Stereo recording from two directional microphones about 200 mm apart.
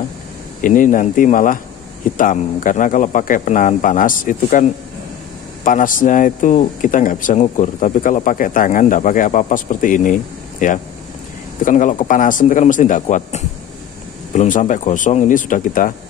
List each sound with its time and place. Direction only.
0.6 s speech: 40° left (ahead or behind)